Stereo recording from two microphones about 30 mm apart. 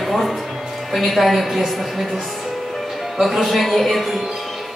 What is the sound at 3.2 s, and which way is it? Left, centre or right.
A man's voice, centre.